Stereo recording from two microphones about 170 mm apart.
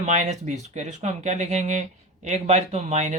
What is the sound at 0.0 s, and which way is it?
Speech, 45° right (ahead or behind).